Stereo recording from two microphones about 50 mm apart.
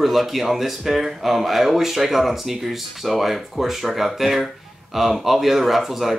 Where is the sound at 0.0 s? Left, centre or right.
Centre.